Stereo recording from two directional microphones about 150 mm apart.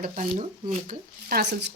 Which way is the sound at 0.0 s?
55° right (ahead or behind).